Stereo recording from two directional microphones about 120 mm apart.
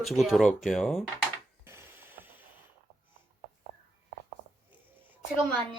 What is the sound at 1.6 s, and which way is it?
Mechanisms, 20° right (ahead or behind).